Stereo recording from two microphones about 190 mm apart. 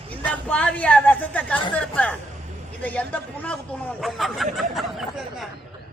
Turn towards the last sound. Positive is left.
turn(degrees=0)  # may be behind; listen again after turning